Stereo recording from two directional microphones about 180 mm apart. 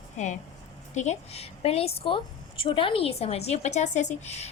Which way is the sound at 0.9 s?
40° left (ahead or behind).